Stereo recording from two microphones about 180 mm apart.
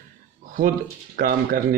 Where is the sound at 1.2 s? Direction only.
50° right (ahead or behind).